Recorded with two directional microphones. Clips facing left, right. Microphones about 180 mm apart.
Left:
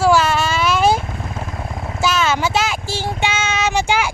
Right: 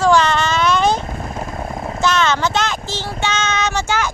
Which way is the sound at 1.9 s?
5° left (ahead or behind).